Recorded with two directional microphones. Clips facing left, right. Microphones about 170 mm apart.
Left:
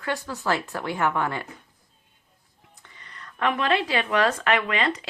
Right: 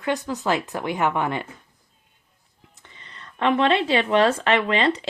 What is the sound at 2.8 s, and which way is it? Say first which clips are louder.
Speech: right 1 dB; 25° right (ahead or behind).